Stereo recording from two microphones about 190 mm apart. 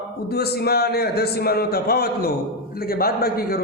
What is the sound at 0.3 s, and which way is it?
A man's voice, 55° left (ahead or behind).